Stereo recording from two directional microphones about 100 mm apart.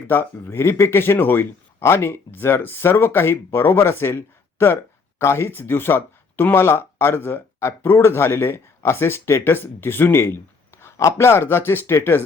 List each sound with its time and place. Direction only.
0.1 s speech: 20° left (ahead or behind)